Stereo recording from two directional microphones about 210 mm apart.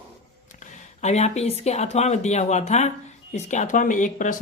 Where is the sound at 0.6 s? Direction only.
35° left (ahead or behind).